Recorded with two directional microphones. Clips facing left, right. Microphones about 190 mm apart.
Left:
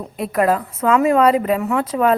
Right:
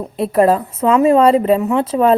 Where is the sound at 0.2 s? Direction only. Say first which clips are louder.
Right 5 dB; 30° right (ahead or behind).